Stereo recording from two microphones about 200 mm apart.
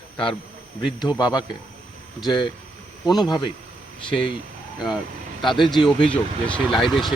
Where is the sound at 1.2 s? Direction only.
20° left (ahead or behind).